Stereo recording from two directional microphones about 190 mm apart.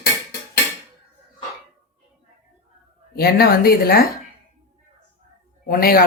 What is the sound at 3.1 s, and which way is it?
Speech, 55° left (ahead or behind).